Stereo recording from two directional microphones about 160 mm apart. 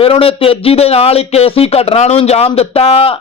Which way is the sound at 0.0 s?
35° left (ahead or behind).